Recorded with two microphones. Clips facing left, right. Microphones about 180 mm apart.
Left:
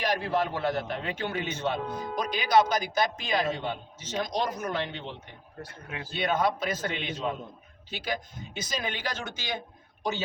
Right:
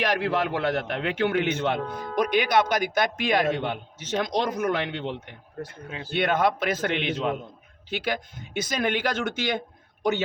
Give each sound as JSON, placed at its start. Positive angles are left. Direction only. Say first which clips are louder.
{"t": 0.0, "sound": "a man's voice", "louder": "right 3 dB", "side_deg": -70}
{"t": 1.9, "sound": "speech", "louder": "even", "side_deg": 15}
{"t": 2.1, "sound": "a man's voice", "louder": "right 2 dB", "side_deg": -65}
{"t": 5.6, "sound": "speech", "louder": "right 2 dB", "side_deg": -25}
{"t": 6.1, "sound": "a man's voice", "louder": "right 4 dB", "side_deg": -65}